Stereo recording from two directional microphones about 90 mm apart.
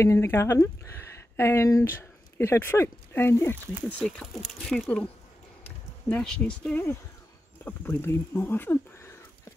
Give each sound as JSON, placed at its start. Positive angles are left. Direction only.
{"t": 0.0, "sound": "speech", "side_deg": 30}
{"t": 4.0, "sound": "speech", "side_deg": 0}
{"t": 6.0, "sound": "speech", "side_deg": 10}
{"t": 6.7, "sound": "speech", "side_deg": 30}